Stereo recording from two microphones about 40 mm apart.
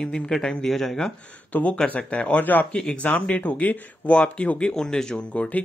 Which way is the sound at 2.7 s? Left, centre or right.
Left.